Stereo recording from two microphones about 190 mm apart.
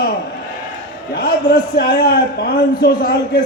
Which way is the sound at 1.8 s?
55° left (ahead or behind).